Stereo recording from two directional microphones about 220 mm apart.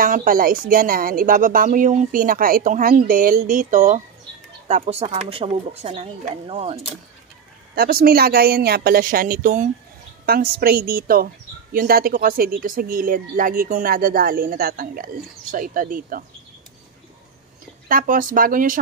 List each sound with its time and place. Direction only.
0.0 s speech: 40° right (ahead or behind)
7.7 s a woman's voice: 45° right (ahead or behind)
17.8 s speech: 40° right (ahead or behind)